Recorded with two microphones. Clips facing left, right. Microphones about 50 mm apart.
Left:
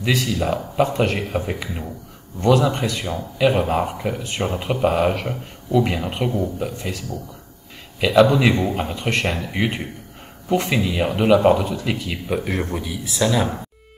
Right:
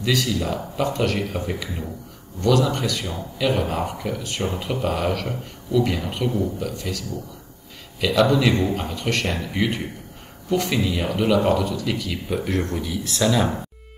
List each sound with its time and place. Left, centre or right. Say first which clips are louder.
0.0 s speech: left 2 dB; left
12.4 s speech: even; centre